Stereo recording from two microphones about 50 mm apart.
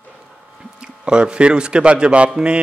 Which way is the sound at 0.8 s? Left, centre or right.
Centre.